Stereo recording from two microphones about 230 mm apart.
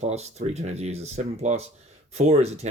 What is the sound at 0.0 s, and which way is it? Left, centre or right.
Speech, right.